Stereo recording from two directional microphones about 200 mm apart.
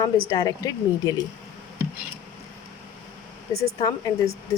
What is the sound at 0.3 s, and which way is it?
Speech, 20° left (ahead or behind).